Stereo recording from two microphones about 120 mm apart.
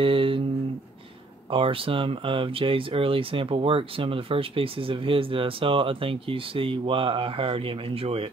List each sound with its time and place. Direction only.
0.0 s humming: 45° right (ahead or behind)
1.5 s speech: 50° right (ahead or behind)